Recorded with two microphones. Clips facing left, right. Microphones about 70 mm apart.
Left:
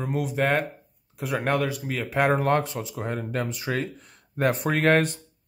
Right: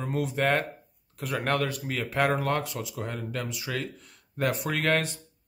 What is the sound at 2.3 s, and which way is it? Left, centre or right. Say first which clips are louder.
Speech: left 5 dB; left.